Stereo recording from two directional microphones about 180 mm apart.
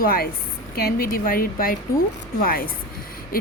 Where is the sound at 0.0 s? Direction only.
55° left (ahead or behind).